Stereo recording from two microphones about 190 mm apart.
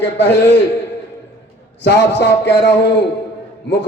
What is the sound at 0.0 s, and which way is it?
Speech, 65° left (ahead or behind).